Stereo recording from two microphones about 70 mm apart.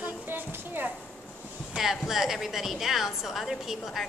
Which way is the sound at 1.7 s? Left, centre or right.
Centre.